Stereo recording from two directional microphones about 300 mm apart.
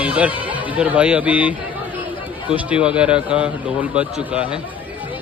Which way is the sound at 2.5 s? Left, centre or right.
Centre.